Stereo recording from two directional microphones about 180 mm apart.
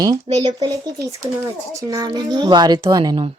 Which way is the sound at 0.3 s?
40° right (ahead or behind).